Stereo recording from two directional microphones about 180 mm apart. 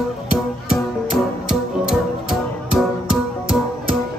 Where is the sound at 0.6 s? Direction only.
5° right (ahead or behind).